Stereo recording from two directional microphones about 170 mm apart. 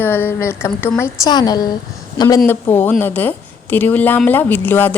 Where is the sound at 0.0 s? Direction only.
10° left (ahead or behind).